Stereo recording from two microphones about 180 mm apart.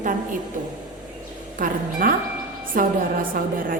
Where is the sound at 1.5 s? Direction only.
50° right (ahead or behind).